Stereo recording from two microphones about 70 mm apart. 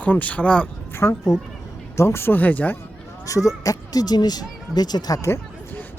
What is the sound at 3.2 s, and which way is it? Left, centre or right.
Speech, left.